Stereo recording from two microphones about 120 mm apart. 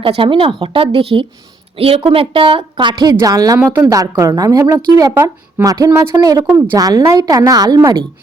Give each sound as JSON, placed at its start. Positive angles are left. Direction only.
{"t": 0.0, "sound": "a woman's voice", "side_deg": -45}
{"t": 3.6, "sound": "a woman's voice", "side_deg": -15}
{"t": 3.8, "sound": "a woman's voice", "side_deg": -30}
{"t": 5.1, "sound": "speech", "side_deg": -20}
{"t": 5.6, "sound": "a woman's voice", "side_deg": -30}